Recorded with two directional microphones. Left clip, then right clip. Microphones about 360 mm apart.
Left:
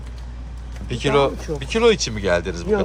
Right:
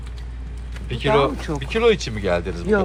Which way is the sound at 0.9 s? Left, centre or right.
Centre.